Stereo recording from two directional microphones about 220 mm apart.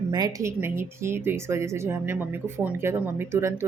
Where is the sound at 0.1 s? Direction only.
15° right (ahead or behind).